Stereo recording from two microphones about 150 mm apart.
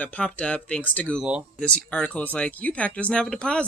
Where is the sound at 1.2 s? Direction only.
5° right (ahead or behind).